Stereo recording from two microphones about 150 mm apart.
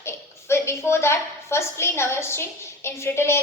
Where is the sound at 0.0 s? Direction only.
15° left (ahead or behind).